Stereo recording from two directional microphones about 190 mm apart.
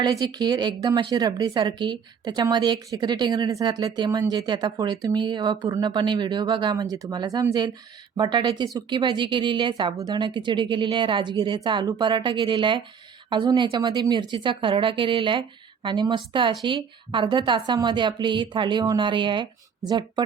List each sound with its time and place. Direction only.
0.0 s speech: 20° right (ahead or behind)